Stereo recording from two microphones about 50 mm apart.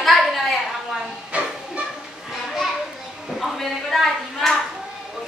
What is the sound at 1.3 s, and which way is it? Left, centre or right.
Music, right.